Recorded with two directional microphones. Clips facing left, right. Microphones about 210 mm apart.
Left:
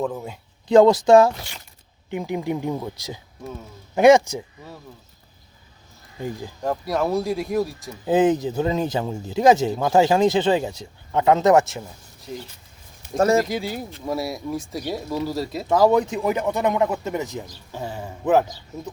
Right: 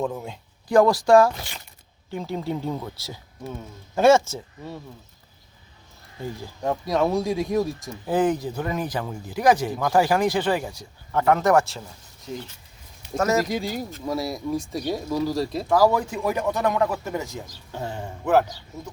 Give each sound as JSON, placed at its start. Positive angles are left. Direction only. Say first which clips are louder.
{"t": 0.0, "sound": "speech", "louder": "left 1 dB", "side_deg": 0}
{"t": 0.7, "sound": "speech", "louder": "left 3 dB", "side_deg": 20}
{"t": 6.1, "sound": "speech", "louder": "left 3 dB", "side_deg": 15}
{"t": 6.6, "sound": "speech", "louder": "right 1 dB", "side_deg": 0}
{"t": 8.0, "sound": "speech", "louder": "left 4 dB", "side_deg": 20}
{"t": 12.3, "sound": "speech", "louder": "even", "side_deg": 0}
{"t": 13.1, "sound": "speech", "louder": "left 4 dB", "side_deg": 30}
{"t": 13.5, "sound": "speech", "louder": "even", "side_deg": 5}
{"t": 15.7, "sound": "speech", "louder": "left 3 dB", "side_deg": 20}
{"t": 17.7, "sound": "speech", "louder": "right 1 dB", "side_deg": 5}